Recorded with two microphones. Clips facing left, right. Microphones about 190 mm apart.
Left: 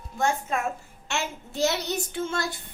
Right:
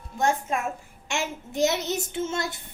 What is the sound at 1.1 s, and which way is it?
Child singing, 20° right (ahead or behind).